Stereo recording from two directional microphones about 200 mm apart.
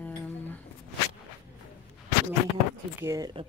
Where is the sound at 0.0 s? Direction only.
10° left (ahead or behind).